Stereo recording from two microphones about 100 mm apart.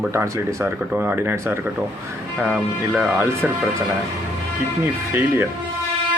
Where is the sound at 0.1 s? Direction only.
25° right (ahead or behind).